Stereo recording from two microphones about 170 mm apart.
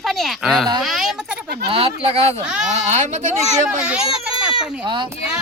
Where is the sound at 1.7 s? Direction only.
35° right (ahead or behind).